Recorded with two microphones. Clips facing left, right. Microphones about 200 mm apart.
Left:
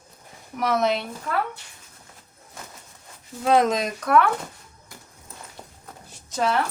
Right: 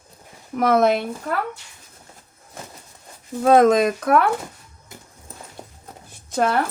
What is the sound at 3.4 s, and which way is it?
Speech, 50° right (ahead or behind).